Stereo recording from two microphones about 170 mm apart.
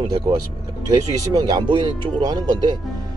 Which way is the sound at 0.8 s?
20° right (ahead or behind).